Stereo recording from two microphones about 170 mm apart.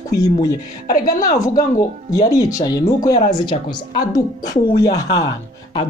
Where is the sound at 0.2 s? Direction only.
20° left (ahead or behind).